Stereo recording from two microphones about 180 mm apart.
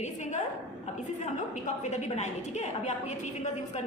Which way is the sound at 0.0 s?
40° left (ahead or behind).